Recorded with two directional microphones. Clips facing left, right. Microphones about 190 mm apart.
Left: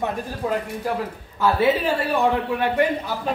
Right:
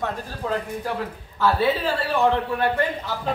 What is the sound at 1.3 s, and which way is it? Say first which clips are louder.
A man's voice: left 2 dB; 15° left (ahead or behind).